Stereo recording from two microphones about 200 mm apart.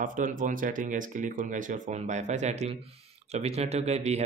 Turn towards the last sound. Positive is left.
turn(degrees=-35)  # may be behind; listen again after turning